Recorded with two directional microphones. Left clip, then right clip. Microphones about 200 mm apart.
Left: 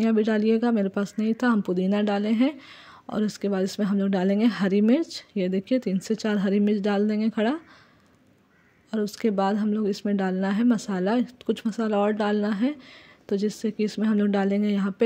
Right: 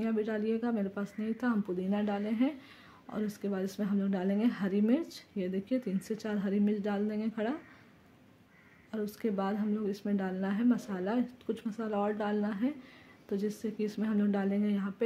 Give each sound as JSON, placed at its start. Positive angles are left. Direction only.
{"t": 0.0, "sound": "speech", "side_deg": 40}
{"t": 8.9, "sound": "speech", "side_deg": 35}